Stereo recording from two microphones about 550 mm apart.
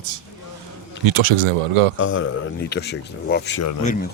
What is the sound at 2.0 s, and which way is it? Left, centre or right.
Speech, left.